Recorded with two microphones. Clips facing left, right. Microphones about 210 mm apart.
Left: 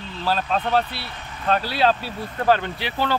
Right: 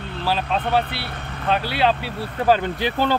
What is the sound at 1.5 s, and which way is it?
Speech, centre (ahead or behind).